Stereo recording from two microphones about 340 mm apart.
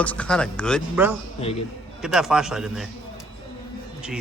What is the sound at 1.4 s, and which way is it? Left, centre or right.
Speech, centre.